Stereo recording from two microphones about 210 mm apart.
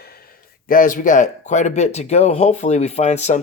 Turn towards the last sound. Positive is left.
turn(degrees=35)  # may be behind; listen again after turning